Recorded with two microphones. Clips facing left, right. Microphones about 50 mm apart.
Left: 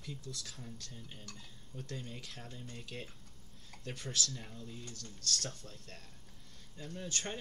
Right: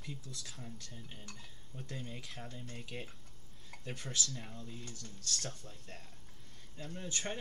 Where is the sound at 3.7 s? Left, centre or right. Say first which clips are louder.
Even; centre.